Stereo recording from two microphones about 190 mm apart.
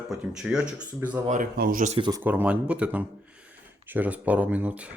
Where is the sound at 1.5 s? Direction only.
50° right (ahead or behind).